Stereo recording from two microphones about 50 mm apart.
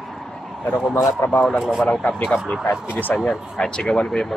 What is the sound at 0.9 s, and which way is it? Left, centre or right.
Speech, left.